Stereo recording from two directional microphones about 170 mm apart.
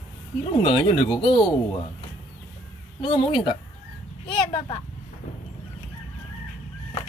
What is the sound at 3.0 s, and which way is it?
Speech, 30° left (ahead or behind).